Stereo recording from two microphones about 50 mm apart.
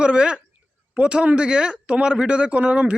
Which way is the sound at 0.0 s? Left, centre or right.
Right.